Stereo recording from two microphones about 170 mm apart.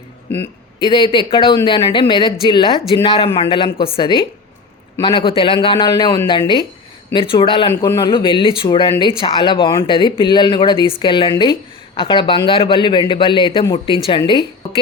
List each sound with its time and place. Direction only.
0.8 s a man's voice: 30° left (ahead or behind)
7.7 s a man's voice: 15° left (ahead or behind)